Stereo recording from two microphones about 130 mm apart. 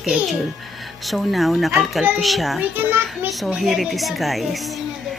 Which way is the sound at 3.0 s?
Centre (ahead or behind).